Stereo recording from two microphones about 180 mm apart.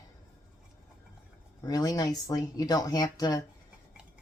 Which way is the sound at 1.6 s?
20° left (ahead or behind).